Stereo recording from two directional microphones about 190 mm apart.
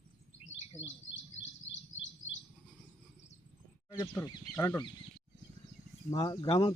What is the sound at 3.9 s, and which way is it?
Speech, 10° left (ahead or behind).